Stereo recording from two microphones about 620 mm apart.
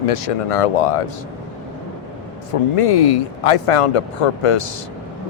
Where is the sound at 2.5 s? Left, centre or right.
Left.